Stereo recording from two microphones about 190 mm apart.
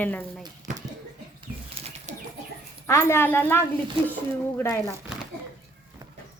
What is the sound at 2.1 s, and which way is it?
Bird flight, 35° right (ahead or behind).